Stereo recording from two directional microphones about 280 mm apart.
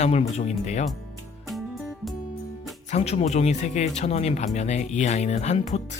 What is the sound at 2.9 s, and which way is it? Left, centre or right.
Speech, left.